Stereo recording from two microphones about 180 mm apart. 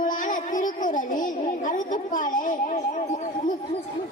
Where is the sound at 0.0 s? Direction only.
50° left (ahead or behind).